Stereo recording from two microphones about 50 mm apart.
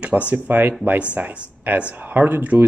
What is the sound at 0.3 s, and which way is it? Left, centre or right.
Speech, right.